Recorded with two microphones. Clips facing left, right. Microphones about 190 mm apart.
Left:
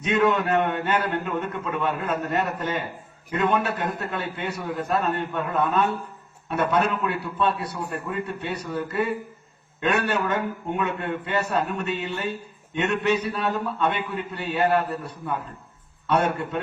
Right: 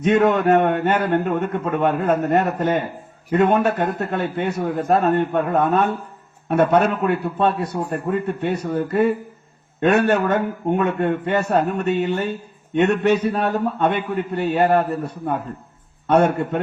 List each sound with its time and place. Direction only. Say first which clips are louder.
0.0 s a man's voice: right 6 dB; 45° right (ahead or behind)